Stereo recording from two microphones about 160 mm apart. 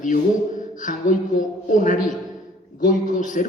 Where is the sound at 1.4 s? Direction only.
55° left (ahead or behind).